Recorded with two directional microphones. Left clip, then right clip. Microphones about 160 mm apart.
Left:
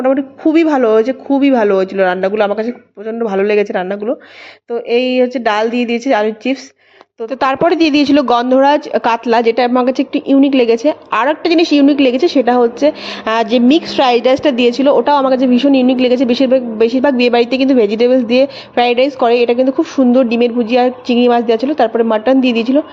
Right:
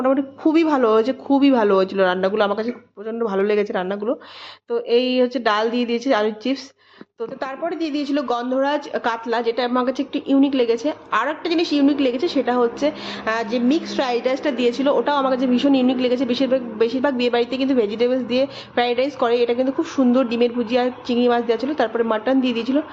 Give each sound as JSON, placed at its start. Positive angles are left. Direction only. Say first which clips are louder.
{"t": 0.0, "sound": "speech", "louder": "left 6 dB", "side_deg": 10}
{"t": 7.3, "sound": "a woman's voice", "louder": "left 15 dB", "side_deg": 65}
{"t": 13.2, "sound": "a woman's voice", "louder": "left 9 dB", "side_deg": 50}